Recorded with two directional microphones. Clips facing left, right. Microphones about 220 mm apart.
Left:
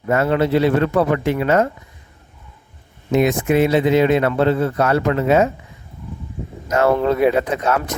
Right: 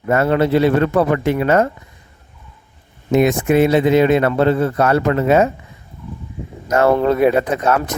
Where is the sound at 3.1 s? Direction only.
50° right (ahead or behind).